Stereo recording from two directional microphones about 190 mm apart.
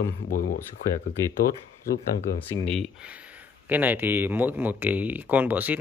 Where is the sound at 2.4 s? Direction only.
5° left (ahead or behind).